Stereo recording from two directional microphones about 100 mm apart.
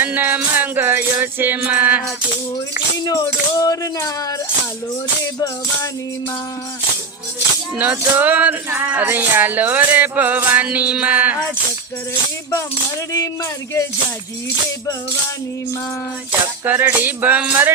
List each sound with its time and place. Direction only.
0.0 s music: 20° right (ahead or behind)
3.0 s speech: 40° left (ahead or behind)
7.8 s music: 15° right (ahead or behind)
13.1 s speech: 30° left (ahead or behind)
16.6 s music: 20° right (ahead or behind)